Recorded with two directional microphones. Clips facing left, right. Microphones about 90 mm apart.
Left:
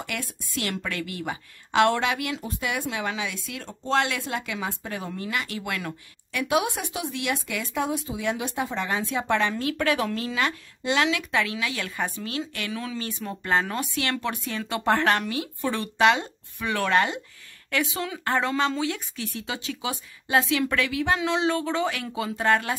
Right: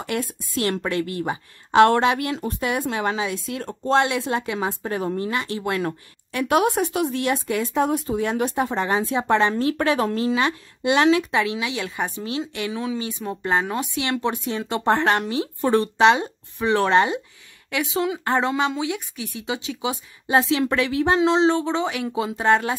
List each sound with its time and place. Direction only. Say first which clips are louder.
0.0 s a woman's voice: right 7 dB; 30° right (ahead or behind)
3.9 s a woman's voice: right 5 dB; 25° right (ahead or behind)
6.5 s a woman's voice: right 6 dB; 45° right (ahead or behind); by 11.0 s 20° right (ahead or behind)
11.0 s speech: right 6 dB; 30° right (ahead or behind)
15.6 s a woman's voice: right 10 dB; 40° right (ahead or behind)
16.0 s speech: right 1 dB; 25° right (ahead or behind)